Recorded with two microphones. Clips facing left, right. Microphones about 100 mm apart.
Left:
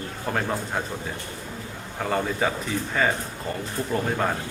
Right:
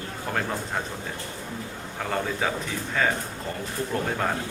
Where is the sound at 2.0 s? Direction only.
Centre (ahead or behind).